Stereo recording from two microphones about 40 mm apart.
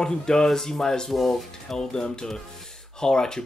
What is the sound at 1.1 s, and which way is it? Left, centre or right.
Speech, centre.